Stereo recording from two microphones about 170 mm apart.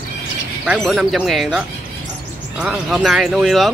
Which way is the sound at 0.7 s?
Centre (ahead or behind).